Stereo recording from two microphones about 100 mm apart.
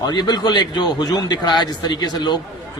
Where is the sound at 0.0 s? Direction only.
45° left (ahead or behind).